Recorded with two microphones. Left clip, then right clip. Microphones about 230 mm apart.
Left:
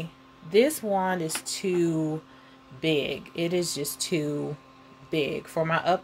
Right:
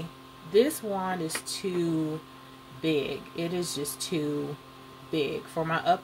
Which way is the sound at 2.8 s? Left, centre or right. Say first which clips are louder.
Left 2 dB; left.